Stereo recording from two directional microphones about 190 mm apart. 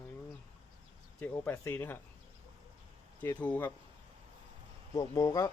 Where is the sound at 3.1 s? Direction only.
10° left (ahead or behind).